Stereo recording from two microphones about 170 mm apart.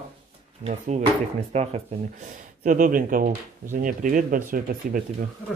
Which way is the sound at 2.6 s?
50° right (ahead or behind).